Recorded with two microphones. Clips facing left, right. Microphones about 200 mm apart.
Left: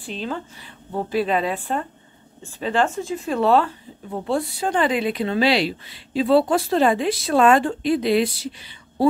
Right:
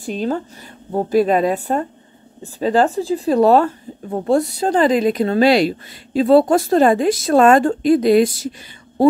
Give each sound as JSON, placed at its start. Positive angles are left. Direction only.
{"t": 0.0, "sound": "speech", "side_deg": -45}